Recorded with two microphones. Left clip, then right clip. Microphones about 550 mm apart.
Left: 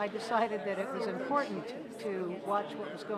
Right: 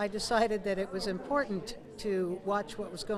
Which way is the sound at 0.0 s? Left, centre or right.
Right.